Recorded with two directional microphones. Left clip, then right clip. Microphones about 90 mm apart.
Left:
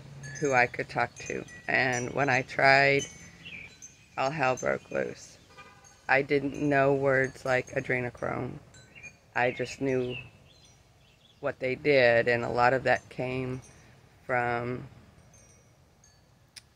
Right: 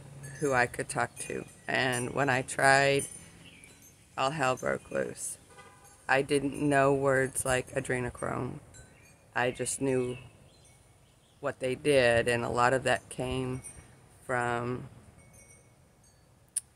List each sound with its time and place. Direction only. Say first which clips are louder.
0.4 s speech: left 3 dB; 10° right (ahead or behind)
4.1 s speech: left 1 dB; 5° right (ahead or behind)
11.4 s speech: left 2 dB; 10° right (ahead or behind)